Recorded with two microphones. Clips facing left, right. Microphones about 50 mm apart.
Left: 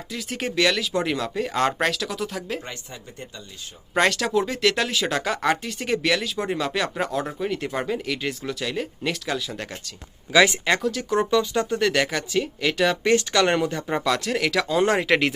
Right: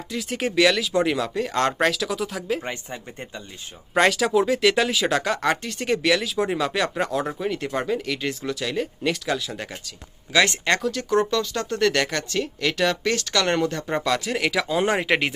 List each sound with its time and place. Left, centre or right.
0.1 s speech: centre
2.6 s speech: right
3.9 s speech: centre
11.3 s speech: centre
11.8 s speech: centre
13.0 s speech: left; by 15.3 s centre